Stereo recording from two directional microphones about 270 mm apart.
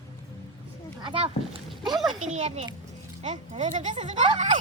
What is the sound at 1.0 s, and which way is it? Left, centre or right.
Speech, centre.